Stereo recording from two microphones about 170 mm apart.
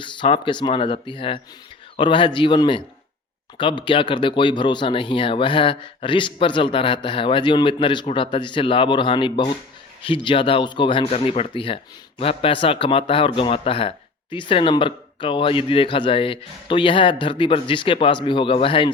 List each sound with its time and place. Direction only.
0.0 s a man's voice: 30° left (ahead or behind)